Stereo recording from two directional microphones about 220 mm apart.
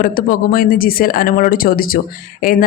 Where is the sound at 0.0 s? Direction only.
40° left (ahead or behind).